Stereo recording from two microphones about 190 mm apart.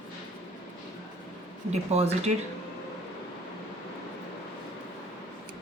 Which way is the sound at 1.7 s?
35° right (ahead or behind).